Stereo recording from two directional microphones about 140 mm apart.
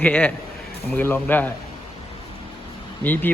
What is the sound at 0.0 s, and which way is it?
Speech, 10° left (ahead or behind).